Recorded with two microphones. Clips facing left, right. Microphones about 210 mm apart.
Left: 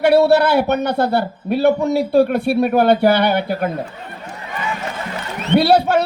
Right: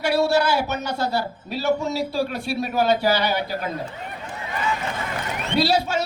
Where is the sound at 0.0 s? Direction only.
60° left (ahead or behind).